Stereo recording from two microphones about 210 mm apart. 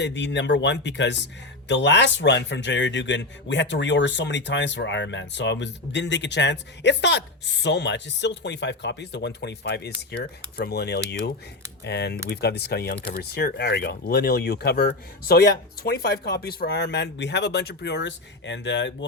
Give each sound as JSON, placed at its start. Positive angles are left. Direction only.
{"t": 0.0, "sound": "speech", "side_deg": 55}